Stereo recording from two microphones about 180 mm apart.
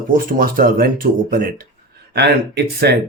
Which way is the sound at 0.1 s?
50° right (ahead or behind).